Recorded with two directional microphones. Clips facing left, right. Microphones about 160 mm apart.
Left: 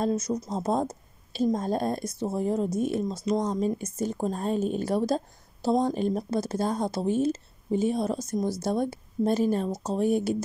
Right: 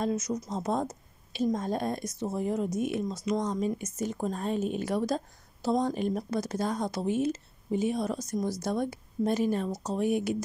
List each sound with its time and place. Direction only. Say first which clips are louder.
0.0 s a woman's voice: left 3 dB; 30° left (ahead or behind)